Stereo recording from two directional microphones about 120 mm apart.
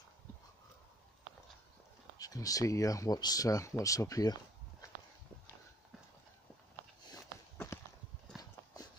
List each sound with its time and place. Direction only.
2.1 s speech: 30° left (ahead or behind)
7.5 s clip-clop: 20° left (ahead or behind)